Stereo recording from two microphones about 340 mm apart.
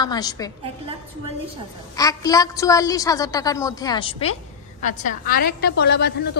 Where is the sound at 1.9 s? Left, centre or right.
Centre.